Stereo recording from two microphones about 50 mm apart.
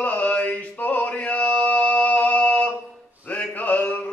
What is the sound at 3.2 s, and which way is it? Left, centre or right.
Mantra, left.